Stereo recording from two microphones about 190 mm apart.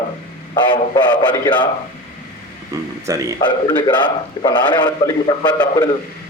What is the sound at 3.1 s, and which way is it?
Speech, 20° right (ahead or behind).